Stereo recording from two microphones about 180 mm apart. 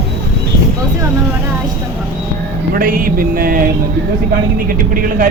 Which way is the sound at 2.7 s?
50° right (ahead or behind).